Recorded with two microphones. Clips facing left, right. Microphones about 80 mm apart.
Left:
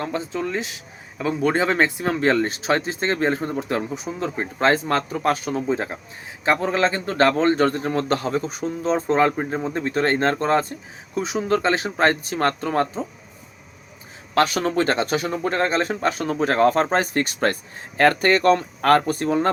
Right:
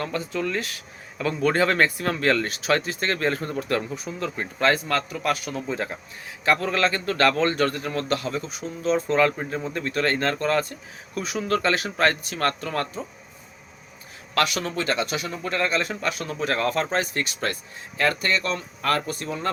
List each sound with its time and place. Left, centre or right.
0.0 s a man's voice: left
14.3 s speech: left